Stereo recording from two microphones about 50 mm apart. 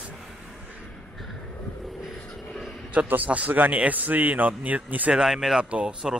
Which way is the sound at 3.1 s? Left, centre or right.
Right.